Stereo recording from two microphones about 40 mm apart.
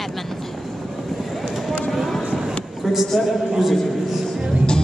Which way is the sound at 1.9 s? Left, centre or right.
Centre.